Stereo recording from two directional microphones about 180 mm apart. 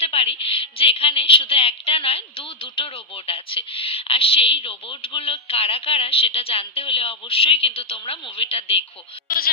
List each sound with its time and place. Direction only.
0.0 s a woman's voice: 35° left (ahead or behind)